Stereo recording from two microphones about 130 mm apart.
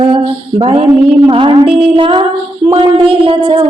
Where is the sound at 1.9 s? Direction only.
40° right (ahead or behind).